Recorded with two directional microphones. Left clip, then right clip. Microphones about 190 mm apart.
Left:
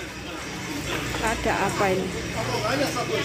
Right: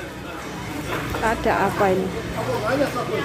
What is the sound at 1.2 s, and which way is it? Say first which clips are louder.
Speech: right 5 dB; 20° right (ahead or behind).